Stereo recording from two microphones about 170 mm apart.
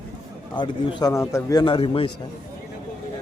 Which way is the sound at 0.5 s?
25° left (ahead or behind).